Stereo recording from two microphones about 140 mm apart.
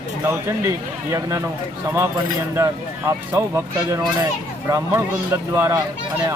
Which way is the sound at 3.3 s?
20° right (ahead or behind).